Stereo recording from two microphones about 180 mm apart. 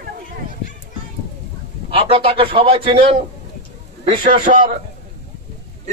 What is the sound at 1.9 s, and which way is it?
A man's voice, 30° right (ahead or behind).